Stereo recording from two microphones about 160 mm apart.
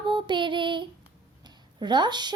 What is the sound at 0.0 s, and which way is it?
Child singing, 30° right (ahead or behind).